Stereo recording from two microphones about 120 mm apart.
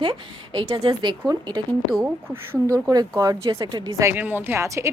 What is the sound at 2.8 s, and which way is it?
A woman's voice, 30° right (ahead or behind).